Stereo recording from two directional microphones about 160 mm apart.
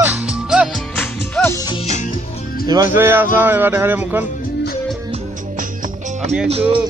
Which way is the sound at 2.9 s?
15° right (ahead or behind).